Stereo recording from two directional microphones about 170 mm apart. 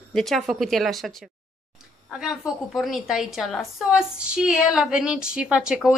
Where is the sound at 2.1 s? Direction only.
5° right (ahead or behind).